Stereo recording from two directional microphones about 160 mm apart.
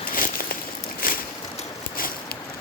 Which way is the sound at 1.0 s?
65° left (ahead or behind).